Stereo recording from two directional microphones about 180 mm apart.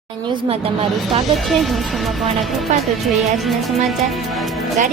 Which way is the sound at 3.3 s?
Centre (ahead or behind).